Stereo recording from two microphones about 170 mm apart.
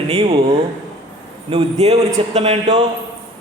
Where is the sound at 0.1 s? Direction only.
35° right (ahead or behind).